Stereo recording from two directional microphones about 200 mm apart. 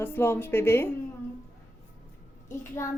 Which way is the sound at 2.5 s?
15° left (ahead or behind).